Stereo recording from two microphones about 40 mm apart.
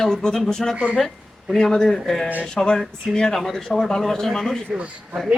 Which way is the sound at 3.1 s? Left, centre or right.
Centre.